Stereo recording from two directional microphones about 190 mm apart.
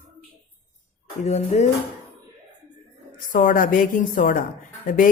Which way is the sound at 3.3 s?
45° left (ahead or behind).